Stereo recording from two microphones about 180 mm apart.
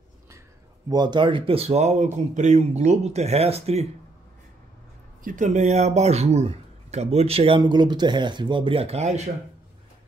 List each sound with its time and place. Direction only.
0.8 s speech: 25° right (ahead or behind)
5.2 s speech: 45° right (ahead or behind)